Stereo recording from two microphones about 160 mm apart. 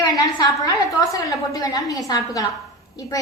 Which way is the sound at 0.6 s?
20° left (ahead or behind).